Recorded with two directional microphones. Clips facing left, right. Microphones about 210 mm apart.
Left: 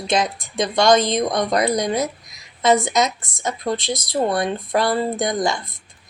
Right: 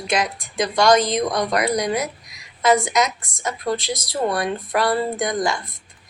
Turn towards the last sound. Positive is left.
turn(degrees=20)  # may be behind; listen again after turning